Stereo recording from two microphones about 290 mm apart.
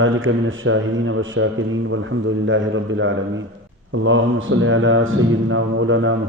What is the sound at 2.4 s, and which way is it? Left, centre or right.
Mantra, right.